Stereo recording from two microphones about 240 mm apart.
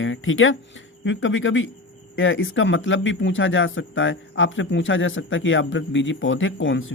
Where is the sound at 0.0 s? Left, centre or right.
Left.